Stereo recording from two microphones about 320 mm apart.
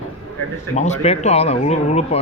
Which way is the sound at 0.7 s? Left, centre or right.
Centre.